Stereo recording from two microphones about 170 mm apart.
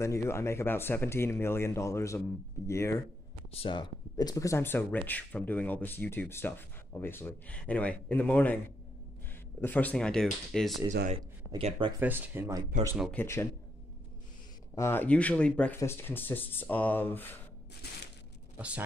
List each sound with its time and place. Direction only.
0.0 s speech: 15° left (ahead or behind)
3.5 s speech: 30° left (ahead or behind); by 10.8 s centre (ahead or behind)
11.1 s speech: 35° right (ahead or behind)
12.0 s speech: 10° right (ahead or behind)
13.1 s speech: 15° left (ahead or behind)
14.8 s speech: 10° left (ahead or behind)
17.8 s a sound: 70° left (ahead or behind)